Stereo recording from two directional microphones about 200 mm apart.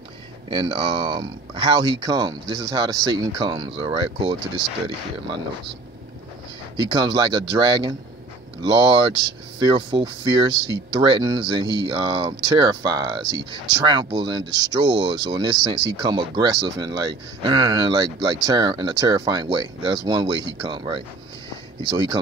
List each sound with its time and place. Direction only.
0.5 s speech: 25° right (ahead or behind)
6.8 s speech: 20° right (ahead or behind)